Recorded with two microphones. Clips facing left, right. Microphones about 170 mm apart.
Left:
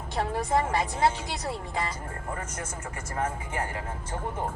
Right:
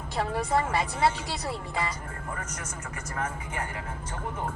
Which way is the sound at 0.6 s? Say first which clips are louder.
Left 1 dB; 25° left (ahead or behind).